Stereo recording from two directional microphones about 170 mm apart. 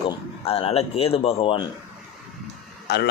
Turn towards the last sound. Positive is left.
turn(degrees=85)